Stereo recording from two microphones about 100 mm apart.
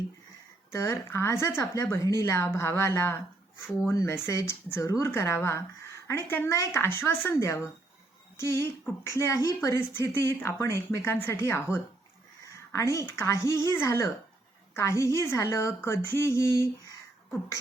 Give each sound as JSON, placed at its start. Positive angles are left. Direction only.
{"t": 0.7, "sound": "a woman's voice", "side_deg": 30}